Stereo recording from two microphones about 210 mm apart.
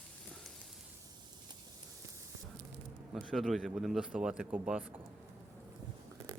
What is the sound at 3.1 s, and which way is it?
Speech, centre (ahead or behind).